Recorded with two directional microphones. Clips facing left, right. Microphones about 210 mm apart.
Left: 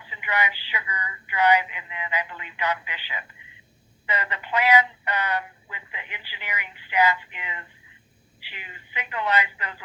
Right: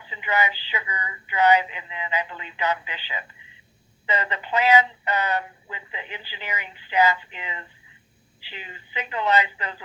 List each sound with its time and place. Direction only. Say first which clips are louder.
0.1 s speech: right 3 dB; 25° right (ahead or behind)